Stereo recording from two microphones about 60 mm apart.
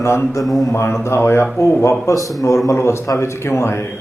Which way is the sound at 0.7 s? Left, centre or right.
Left.